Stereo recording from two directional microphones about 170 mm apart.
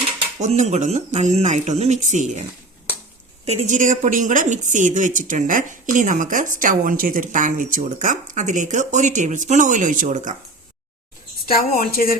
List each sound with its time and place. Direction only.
0.3 s a woman's voice: 45° right (ahead or behind)
3.4 s a woman's voice: 40° right (ahead or behind)
11.4 s a woman's voice: 60° left (ahead or behind)